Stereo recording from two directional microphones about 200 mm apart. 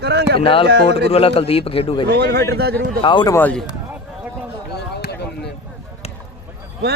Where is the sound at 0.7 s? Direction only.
55° right (ahead or behind).